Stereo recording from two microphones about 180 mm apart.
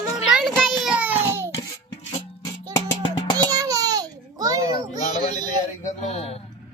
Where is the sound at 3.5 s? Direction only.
20° right (ahead or behind).